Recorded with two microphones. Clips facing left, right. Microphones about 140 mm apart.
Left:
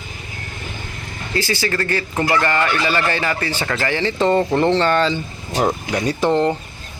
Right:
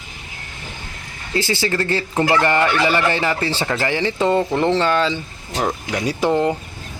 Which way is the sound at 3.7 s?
15° right (ahead or behind).